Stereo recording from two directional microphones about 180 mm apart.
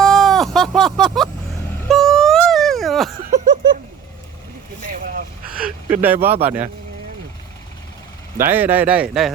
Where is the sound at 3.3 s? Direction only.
45° right (ahead or behind).